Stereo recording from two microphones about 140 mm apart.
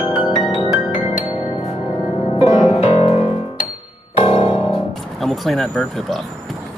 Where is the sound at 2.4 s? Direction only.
50° left (ahead or behind).